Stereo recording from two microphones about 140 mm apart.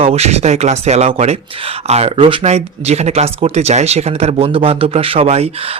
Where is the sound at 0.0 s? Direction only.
50° right (ahead or behind).